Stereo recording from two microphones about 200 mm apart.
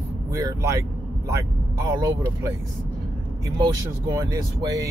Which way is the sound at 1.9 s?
15° right (ahead or behind).